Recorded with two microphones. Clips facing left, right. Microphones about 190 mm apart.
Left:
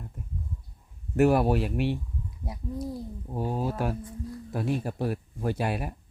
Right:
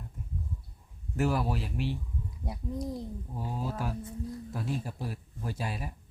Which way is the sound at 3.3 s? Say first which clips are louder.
Left 7 dB; 65° left (ahead or behind).